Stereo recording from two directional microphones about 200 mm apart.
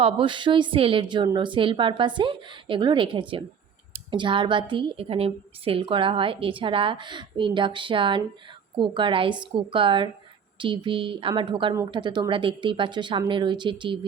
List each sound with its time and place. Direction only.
0.0 s a woman's voice: 25° right (ahead or behind)